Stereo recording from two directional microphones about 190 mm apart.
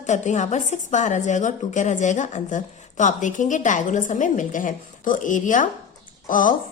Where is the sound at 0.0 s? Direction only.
40° left (ahead or behind).